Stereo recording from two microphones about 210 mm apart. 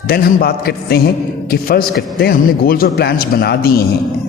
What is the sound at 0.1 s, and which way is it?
A woman's voice, 45° left (ahead or behind).